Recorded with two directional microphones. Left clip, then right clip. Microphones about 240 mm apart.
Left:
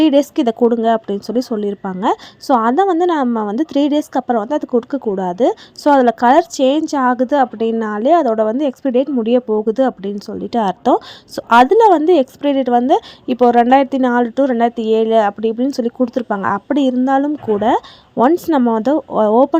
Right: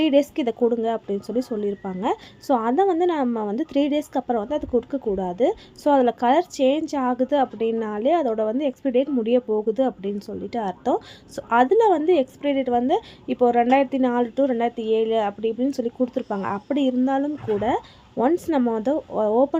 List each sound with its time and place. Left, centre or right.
0.0 s speech: left